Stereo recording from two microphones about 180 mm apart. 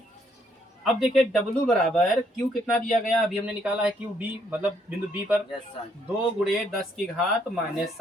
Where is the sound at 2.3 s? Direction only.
Centre (ahead or behind).